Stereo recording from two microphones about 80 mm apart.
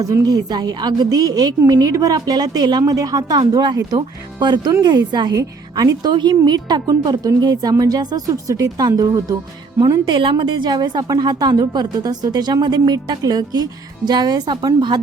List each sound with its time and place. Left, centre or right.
0.0 s a woman's voice: right
10.1 s a woman's voice: right